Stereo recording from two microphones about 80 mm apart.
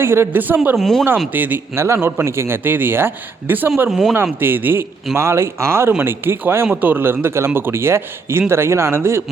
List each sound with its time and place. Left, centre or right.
0.0 s a man's voice: right
0.8 s speech: centre
1.3 s a man's voice: right
3.8 s speech: centre
4.1 s a man's voice: right